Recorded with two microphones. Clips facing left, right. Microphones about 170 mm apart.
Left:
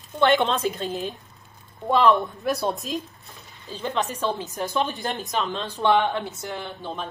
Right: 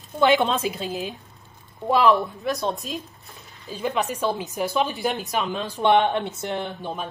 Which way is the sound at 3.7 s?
10° right (ahead or behind).